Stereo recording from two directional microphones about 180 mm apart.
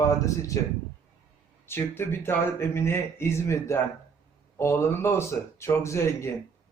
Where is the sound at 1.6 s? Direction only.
15° left (ahead or behind).